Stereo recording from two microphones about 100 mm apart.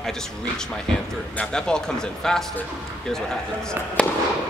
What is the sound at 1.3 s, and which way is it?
Speech, 10° left (ahead or behind).